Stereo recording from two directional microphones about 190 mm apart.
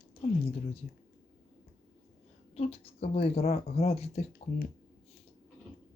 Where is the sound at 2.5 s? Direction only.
30° left (ahead or behind).